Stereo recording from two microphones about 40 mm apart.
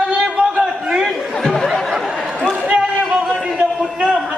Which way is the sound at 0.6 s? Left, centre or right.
Centre.